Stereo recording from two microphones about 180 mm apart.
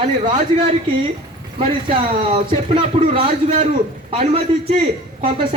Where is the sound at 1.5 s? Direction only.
30° right (ahead or behind).